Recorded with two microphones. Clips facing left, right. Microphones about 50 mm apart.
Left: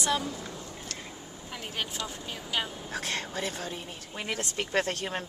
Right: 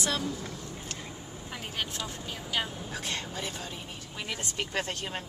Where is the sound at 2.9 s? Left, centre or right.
Left.